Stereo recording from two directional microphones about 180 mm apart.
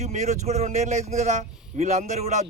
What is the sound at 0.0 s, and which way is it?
Speech, 40° right (ahead or behind).